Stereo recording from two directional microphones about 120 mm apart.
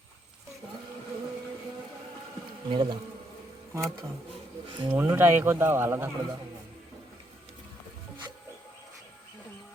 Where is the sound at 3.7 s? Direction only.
25° right (ahead or behind).